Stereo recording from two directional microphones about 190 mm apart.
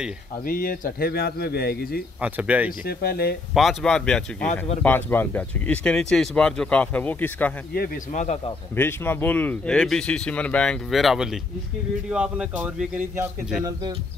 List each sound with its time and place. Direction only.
0.5 s speech: 50° left (ahead or behind)
2.1 s speech: 5° right (ahead or behind)
2.8 s speech: 55° left (ahead or behind)
3.5 s speech: centre (ahead or behind)
8.1 s a man's voice: 40° left (ahead or behind)
8.7 s speech: 10° left (ahead or behind); by 13.7 s 10° right (ahead or behind)